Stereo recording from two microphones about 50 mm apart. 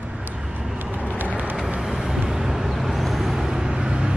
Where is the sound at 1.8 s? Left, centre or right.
Centre.